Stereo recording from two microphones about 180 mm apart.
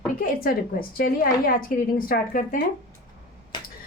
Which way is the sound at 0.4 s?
55° left (ahead or behind).